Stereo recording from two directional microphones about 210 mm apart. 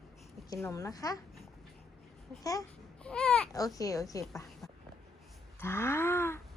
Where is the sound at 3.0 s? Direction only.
5° left (ahead or behind).